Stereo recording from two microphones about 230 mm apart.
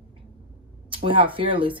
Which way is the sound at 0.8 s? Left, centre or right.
Right.